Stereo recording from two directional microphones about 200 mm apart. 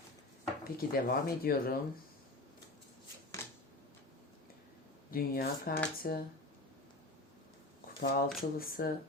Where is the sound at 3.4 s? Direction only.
15° left (ahead or behind).